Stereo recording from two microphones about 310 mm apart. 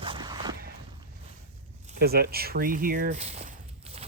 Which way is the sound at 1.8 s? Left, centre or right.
Right.